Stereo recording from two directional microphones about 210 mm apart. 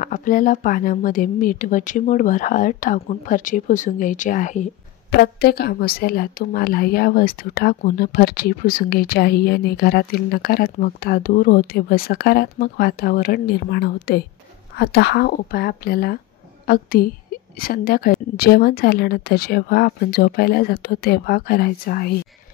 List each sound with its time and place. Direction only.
0.0 s speech: 40° left (ahead or behind)
5.2 s speech: 50° left (ahead or behind)